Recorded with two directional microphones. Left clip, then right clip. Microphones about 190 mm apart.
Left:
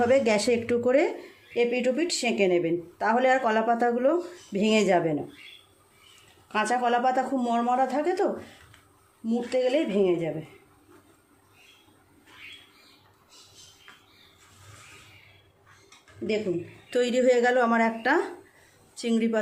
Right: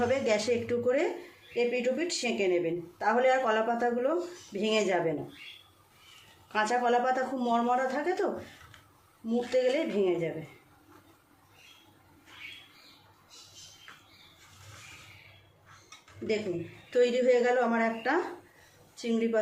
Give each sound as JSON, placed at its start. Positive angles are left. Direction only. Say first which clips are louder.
{"t": 0.1, "sound": "a woman's voice", "louder": "left 5 dB", "side_deg": 50}
{"t": 6.5, "sound": "speech", "louder": "left 2 dB", "side_deg": 40}
{"t": 16.9, "sound": "a woman's voice", "louder": "left 2 dB", "side_deg": 60}